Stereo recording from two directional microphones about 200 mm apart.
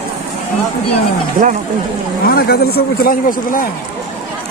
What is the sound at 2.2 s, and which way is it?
A man's voice, 50° left (ahead or behind).